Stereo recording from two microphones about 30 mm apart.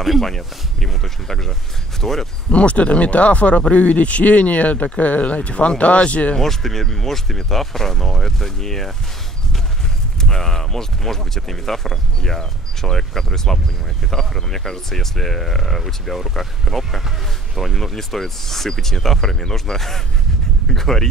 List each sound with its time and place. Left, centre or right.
0.0 s speech: centre
2.5 s speech: left
6.4 s speech: centre
10.2 s speech: centre